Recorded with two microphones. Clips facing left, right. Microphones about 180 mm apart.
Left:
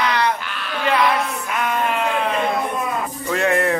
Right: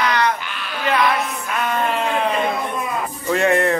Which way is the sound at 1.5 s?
10° left (ahead or behind).